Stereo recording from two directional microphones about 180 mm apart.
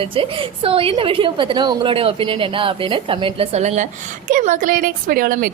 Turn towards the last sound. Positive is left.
turn(degrees=-55)  # may be behind; listen again after turning